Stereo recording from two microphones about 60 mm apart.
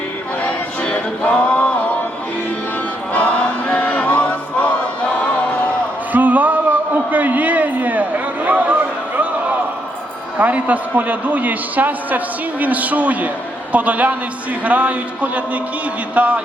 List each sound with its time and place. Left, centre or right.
0.4 s music: left
3.1 s choir: left
6.1 s a sound: right
10.3 s a man's voice: right